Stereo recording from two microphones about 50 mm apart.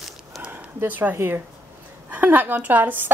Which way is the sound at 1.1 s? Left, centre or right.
Right.